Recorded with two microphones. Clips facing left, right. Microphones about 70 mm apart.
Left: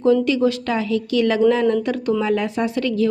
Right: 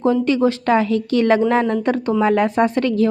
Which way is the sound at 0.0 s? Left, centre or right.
Right.